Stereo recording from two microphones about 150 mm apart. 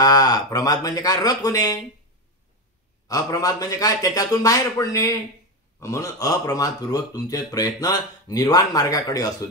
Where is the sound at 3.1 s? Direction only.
25° left (ahead or behind).